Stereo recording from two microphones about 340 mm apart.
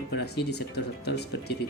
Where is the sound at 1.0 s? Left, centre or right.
Left.